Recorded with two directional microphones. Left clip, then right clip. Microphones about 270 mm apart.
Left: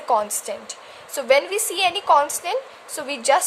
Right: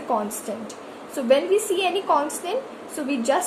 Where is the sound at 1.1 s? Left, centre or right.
Left.